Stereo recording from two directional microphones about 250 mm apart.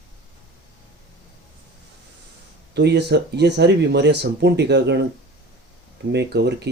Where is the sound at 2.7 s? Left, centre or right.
Right.